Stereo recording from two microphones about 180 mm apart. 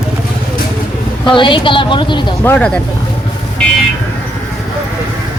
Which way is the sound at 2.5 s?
5° left (ahead or behind).